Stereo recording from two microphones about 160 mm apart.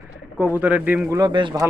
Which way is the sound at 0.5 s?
10° right (ahead or behind).